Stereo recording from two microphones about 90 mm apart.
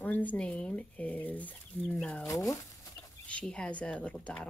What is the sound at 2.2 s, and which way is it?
Speech, 40° left (ahead or behind).